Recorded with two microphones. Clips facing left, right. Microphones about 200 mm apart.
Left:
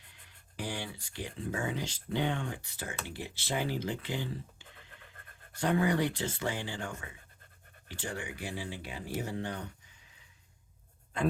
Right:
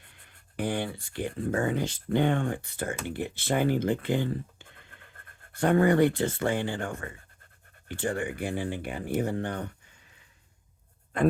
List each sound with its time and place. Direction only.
0.3 s speech: 55° right (ahead or behind)